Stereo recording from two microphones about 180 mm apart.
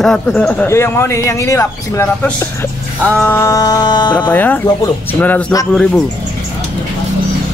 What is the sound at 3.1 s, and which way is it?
Music, 10° left (ahead or behind).